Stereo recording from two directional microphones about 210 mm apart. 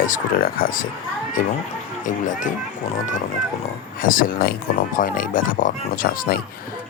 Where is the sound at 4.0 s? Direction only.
40° left (ahead or behind).